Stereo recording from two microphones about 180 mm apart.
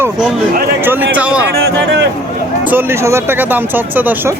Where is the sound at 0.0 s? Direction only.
5° right (ahead or behind).